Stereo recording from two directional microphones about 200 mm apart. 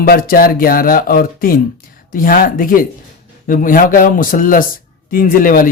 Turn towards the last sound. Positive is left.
turn(degrees=45)  # may be behind; listen again after turning